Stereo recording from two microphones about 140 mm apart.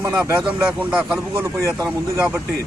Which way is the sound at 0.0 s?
20° right (ahead or behind).